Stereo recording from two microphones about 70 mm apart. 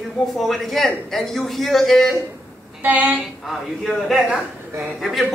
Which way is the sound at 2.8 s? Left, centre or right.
Right.